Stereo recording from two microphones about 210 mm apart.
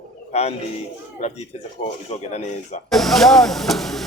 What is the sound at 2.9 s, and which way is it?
Speech, centre (ahead or behind).